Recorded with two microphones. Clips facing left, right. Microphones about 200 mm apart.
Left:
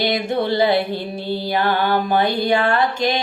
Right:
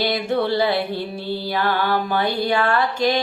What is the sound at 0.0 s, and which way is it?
Music, 20° left (ahead or behind).